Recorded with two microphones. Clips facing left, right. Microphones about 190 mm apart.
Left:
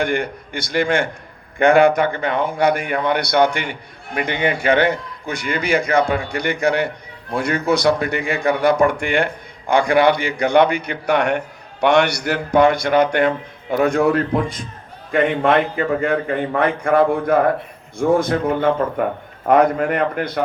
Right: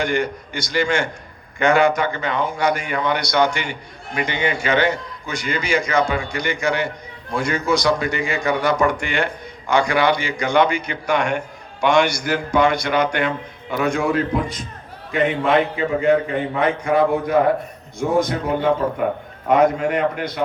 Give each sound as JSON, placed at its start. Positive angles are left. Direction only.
{"t": 0.0, "sound": "a man's voice", "side_deg": 55}